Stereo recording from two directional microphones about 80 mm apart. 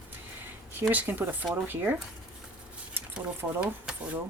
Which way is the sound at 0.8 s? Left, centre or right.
Right.